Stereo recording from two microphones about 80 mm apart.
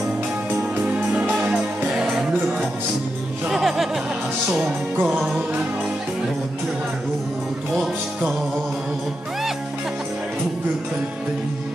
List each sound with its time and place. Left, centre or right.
0.5 s music: centre
3.4 s music: centre
4.9 s music: right
7.7 s music: centre